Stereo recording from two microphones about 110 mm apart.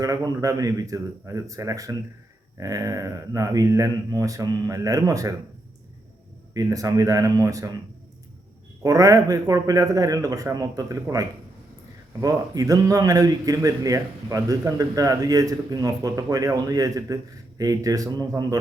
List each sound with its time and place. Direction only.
0.0 s a man's voice: 30° right (ahead or behind)
6.5 s a man's voice: 30° right (ahead or behind)
8.8 s a man's voice: 30° right (ahead or behind)